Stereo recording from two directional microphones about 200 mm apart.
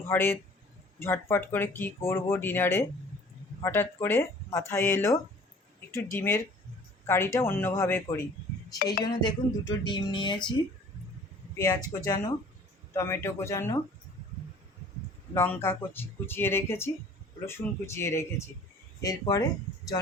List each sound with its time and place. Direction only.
0.1 s speech: 10° left (ahead or behind)
11.5 s speech: 15° left (ahead or behind)
15.4 s speech: 10° left (ahead or behind)